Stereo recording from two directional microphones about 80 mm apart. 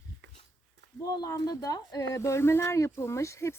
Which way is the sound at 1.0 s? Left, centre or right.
Left.